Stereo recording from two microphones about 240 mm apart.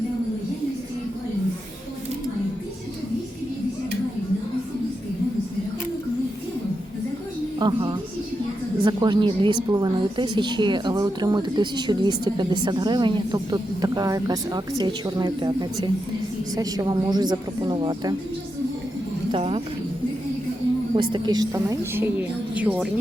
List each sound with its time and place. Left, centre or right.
7.6 s a woman's voice: centre
19.3 s a woman's voice: right
20.9 s a woman's voice: centre